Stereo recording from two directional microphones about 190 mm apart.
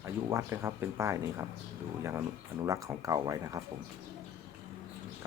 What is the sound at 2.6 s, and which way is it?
Speech, 15° right (ahead or behind).